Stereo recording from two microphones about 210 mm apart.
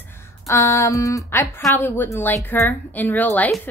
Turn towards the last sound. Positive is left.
turn(degrees=10)  # may be behind; listen again after turning